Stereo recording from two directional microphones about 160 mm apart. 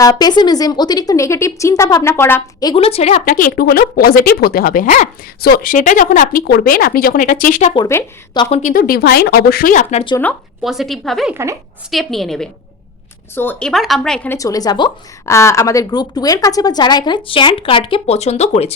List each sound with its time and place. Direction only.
0.0 s a woman's voice: 25° left (ahead or behind)
2.6 s speech: 35° left (ahead or behind)
3.2 s speech: 60° left (ahead or behind)
7.8 s a woman's voice: 20° left (ahead or behind)
8.4 s speech: 45° left (ahead or behind)
8.8 s speech: 75° left (ahead or behind); by 10.0 s 55° left (ahead or behind)
10.6 s speech: centre (ahead or behind)
13.3 s speech: 10° left (ahead or behind)
14.3 s a woman's voice: 20° left (ahead or behind); by 18.7 s 45° left (ahead or behind)